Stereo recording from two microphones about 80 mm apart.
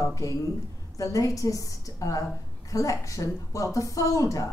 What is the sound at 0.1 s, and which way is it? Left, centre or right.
A woman's voice, left.